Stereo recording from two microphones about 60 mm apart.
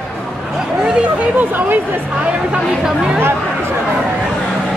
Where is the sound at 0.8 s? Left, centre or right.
Centre.